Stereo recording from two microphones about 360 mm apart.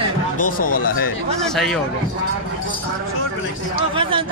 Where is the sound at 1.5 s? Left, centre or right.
Centre.